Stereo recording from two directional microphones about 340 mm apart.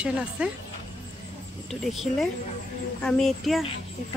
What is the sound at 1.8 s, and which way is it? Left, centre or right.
A woman's voice, centre.